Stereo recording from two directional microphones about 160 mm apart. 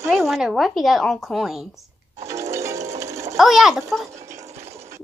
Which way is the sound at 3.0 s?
20° right (ahead or behind).